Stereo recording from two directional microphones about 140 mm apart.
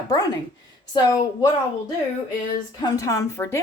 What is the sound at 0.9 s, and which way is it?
Speech, 25° left (ahead or behind).